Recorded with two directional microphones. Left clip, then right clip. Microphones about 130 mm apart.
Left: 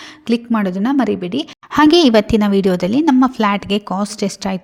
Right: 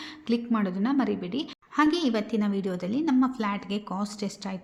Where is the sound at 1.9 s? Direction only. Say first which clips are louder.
Left 16 dB; 90° left.